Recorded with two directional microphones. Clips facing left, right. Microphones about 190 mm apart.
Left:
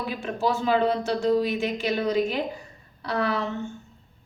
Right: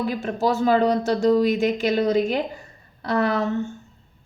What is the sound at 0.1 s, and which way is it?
Speech, 40° right (ahead or behind).